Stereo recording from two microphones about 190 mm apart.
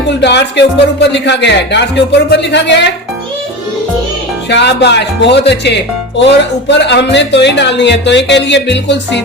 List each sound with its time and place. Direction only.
0.2 s speech: 65° left (ahead or behind)
4.4 s speech: 65° left (ahead or behind)